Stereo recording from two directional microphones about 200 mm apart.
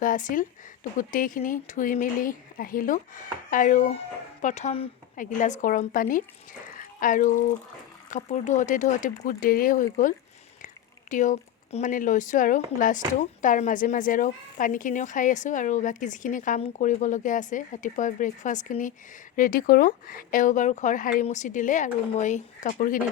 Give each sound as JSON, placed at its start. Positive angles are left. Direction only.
{"t": 0.0, "sound": "a woman's voice", "side_deg": 40}
{"t": 11.1, "sound": "a woman's voice", "side_deg": 40}